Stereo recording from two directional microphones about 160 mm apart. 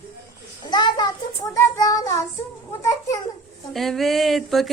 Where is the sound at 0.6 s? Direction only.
25° left (ahead or behind).